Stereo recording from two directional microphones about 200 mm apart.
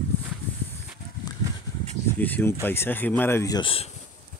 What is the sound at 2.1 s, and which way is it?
Speech, 10° left (ahead or behind).